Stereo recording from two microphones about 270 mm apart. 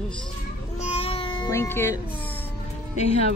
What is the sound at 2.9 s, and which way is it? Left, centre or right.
Speech, left.